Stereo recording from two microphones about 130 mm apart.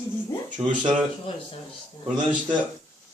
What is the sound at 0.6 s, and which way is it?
Speech, 40° right (ahead or behind).